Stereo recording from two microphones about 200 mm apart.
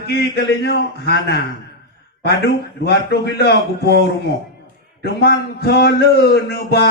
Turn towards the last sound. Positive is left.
turn(degrees=50)  # may be behind; listen again after turning